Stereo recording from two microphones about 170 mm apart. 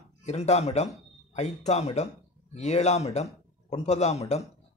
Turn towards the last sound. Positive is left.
turn(degrees=40)  # may be behind; listen again after turning